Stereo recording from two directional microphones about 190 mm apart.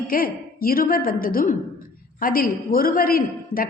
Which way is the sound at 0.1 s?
50° left (ahead or behind).